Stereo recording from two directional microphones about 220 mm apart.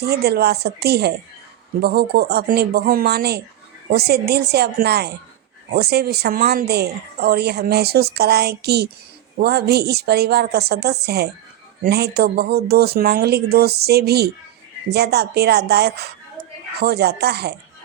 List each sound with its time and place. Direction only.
0.0 s a woman's voice: 45° right (ahead or behind)